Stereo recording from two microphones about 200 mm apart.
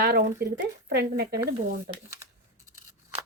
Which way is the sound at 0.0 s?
55° right (ahead or behind).